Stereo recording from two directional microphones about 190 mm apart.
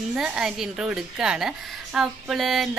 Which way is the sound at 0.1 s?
5° right (ahead or behind).